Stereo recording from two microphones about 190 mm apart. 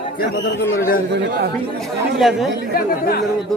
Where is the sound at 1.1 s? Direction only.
60° right (ahead or behind).